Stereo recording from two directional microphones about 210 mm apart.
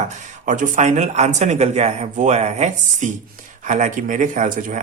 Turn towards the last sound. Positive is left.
turn(degrees=-35)  # may be behind; listen again after turning